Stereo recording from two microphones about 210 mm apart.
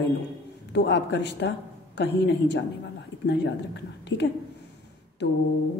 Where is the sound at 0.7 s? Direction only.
55° left (ahead or behind).